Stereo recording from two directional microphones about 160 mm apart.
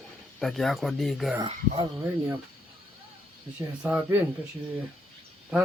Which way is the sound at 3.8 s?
5° right (ahead or behind).